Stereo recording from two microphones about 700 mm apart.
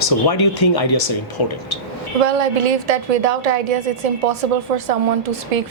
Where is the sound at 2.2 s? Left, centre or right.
Right.